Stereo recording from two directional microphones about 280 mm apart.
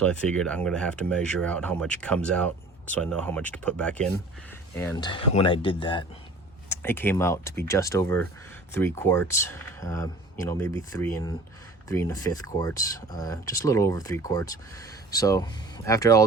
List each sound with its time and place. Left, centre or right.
0.0 s speech: centre
6.7 s speech: centre